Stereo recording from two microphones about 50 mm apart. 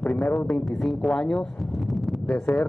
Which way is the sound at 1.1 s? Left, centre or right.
Centre.